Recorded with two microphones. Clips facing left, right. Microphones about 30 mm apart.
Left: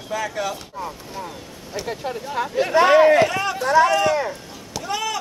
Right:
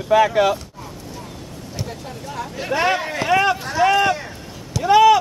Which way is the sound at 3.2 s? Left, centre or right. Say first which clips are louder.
Right 3 dB; centre.